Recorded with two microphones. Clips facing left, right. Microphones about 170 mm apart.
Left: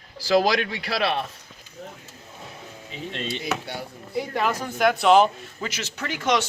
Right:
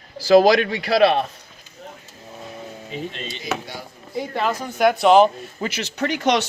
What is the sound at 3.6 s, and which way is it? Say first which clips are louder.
Speech: left 1 dB; 60° left (ahead or behind).